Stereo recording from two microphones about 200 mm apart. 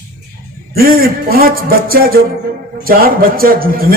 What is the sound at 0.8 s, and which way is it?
A man's voice, 50° right (ahead or behind).